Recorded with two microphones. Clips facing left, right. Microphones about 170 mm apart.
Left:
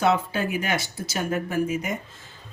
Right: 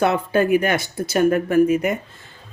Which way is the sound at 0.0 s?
55° right (ahead or behind).